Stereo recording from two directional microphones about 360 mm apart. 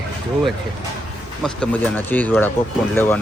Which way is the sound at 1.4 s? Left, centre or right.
Centre.